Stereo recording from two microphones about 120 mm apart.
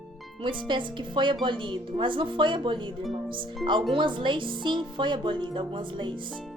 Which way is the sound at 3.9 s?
40° right (ahead or behind).